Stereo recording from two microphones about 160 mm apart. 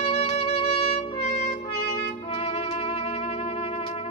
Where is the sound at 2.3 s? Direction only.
35° left (ahead or behind).